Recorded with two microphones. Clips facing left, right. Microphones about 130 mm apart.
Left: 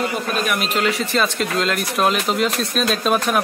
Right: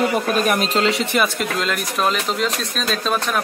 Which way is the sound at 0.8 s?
25° right (ahead or behind).